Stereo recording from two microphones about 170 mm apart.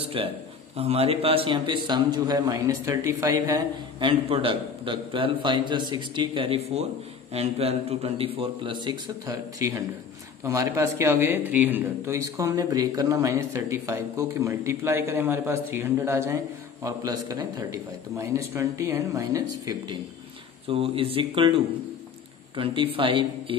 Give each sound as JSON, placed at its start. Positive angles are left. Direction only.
{"t": 0.2, "sound": "a man's voice", "side_deg": -30}
{"t": 4.1, "sound": "a man's voice", "side_deg": -35}
{"t": 20.6, "sound": "a man's voice", "side_deg": -35}
{"t": 22.6, "sound": "a man's voice", "side_deg": -30}